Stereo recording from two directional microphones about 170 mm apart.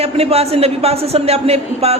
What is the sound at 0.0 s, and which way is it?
A man's voice, 35° right (ahead or behind).